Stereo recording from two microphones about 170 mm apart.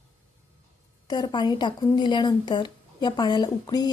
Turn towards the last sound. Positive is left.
turn(degrees=25)  # may be behind; listen again after turning